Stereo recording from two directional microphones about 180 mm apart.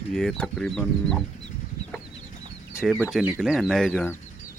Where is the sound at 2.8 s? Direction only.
5° right (ahead or behind).